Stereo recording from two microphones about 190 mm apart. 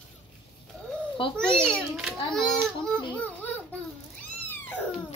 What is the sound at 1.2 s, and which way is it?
Speech, 25° left (ahead or behind).